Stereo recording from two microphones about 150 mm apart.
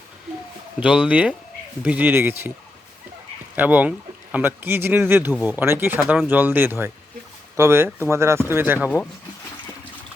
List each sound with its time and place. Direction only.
0.8 s speech: 5° right (ahead or behind)
3.5 s speech: 10° right (ahead or behind)
6.0 s speech: centre (ahead or behind)